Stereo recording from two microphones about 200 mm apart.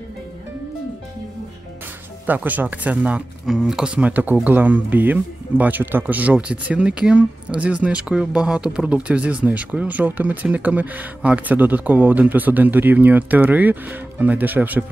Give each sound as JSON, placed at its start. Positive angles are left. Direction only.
{"t": 2.2, "sound": "speech", "side_deg": -10}